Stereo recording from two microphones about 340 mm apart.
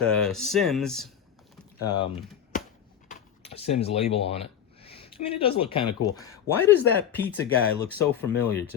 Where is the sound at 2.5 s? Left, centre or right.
Left.